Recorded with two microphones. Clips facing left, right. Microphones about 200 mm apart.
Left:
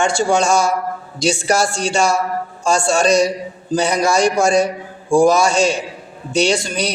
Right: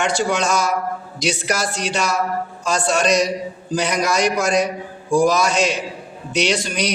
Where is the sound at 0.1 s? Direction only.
30° left (ahead or behind).